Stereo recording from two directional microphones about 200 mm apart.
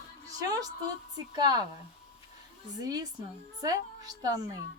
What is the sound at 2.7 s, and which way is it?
Speech, 20° right (ahead or behind).